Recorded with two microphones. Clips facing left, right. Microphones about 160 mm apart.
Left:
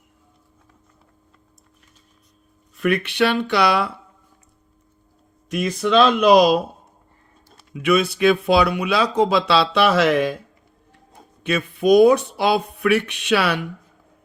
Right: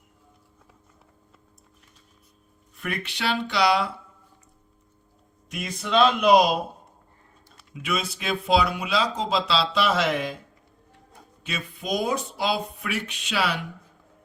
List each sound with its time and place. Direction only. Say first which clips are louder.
2.8 s speech: left 10 dB; 70° left (ahead or behind)
5.5 s speech: left 8 dB; 75° left (ahead or behind)
7.7 s speech: left 11 dB; 65° left (ahead or behind)
11.4 s speech: left 14 dB; 60° left (ahead or behind)